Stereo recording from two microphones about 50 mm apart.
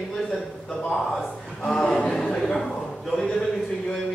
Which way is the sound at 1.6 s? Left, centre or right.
Centre.